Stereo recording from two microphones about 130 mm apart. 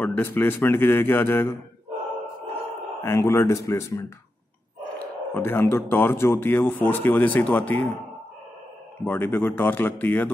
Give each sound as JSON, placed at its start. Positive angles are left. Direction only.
{"t": 0.0, "sound": "a man's voice", "side_deg": 15}
{"t": 3.0, "sound": "a man's voice", "side_deg": 20}
{"t": 9.0, "sound": "a man's voice", "side_deg": 15}